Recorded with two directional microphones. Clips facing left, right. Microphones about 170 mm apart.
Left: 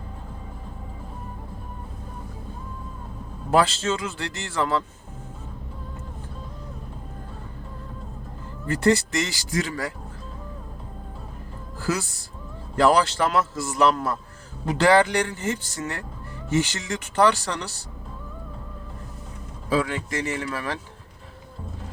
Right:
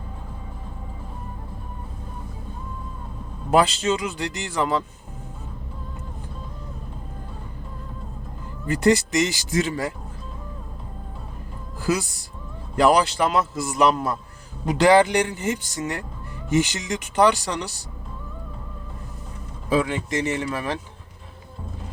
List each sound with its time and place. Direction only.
3.5 s a man's voice: 15° right (ahead or behind)
8.6 s speech: 15° right (ahead or behind)
11.8 s a woman's voice: 15° right (ahead or behind)
19.7 s speech: 20° right (ahead or behind)